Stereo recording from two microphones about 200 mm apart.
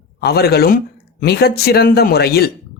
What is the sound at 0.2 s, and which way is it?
Speech, 50° left (ahead or behind).